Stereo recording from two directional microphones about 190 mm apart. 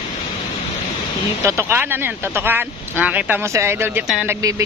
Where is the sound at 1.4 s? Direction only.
15° right (ahead or behind).